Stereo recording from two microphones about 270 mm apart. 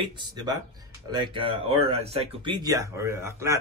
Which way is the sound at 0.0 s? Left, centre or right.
Centre.